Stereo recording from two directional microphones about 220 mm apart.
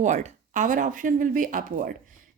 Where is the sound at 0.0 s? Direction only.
35° right (ahead or behind).